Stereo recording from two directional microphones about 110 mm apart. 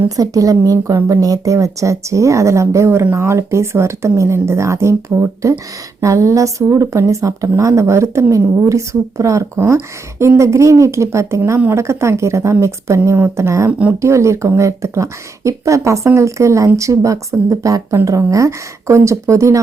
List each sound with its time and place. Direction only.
0.2 s speech: 30° right (ahead or behind)
13.7 s speech: 15° right (ahead or behind)
14.0 s speech: 25° right (ahead or behind)